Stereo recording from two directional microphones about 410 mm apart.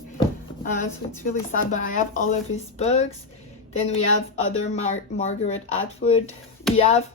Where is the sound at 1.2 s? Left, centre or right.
Centre.